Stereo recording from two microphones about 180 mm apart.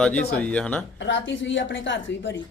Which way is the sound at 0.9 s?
85° left.